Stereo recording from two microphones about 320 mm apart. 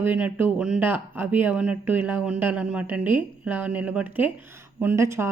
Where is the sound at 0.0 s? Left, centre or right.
Centre.